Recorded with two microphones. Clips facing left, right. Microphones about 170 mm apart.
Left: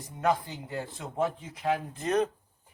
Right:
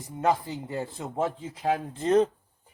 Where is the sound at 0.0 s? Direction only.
25° right (ahead or behind).